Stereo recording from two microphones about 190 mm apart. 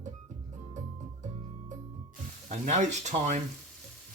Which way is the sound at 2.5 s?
35° right (ahead or behind).